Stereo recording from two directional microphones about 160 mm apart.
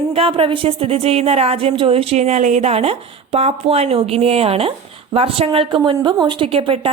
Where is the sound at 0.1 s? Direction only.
35° right (ahead or behind).